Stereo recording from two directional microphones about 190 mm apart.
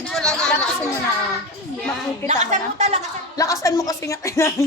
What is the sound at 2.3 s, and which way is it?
Speech, 40° right (ahead or behind).